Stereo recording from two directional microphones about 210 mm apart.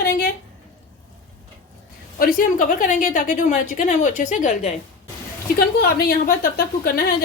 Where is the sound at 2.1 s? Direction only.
40° left (ahead or behind).